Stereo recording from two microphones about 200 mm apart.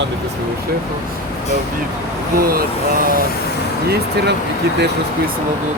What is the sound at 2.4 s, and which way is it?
Speech, 50° right (ahead or behind).